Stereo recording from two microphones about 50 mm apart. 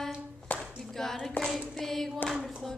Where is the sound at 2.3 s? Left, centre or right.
Centre.